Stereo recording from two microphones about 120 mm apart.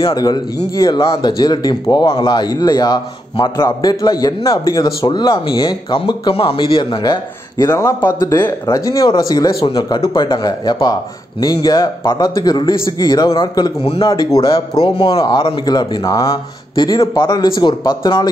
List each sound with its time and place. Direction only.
0.1 s speech: 30° left (ahead or behind)
7.6 s speech: 25° left (ahead or behind)